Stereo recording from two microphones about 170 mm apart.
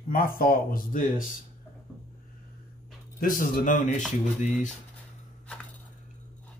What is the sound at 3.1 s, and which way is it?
Speech, 55° left (ahead or behind).